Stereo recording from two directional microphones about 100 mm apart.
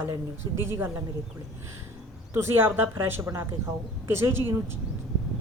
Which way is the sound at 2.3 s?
25° right (ahead or behind).